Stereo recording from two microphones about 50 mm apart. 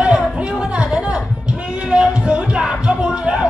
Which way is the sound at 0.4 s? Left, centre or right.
Centre.